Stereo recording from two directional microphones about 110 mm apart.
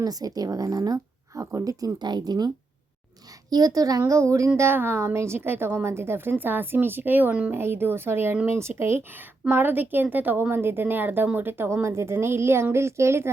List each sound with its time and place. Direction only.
0.0 s speech: 35° right (ahead or behind)
3.5 s a woman's voice: 35° right (ahead or behind)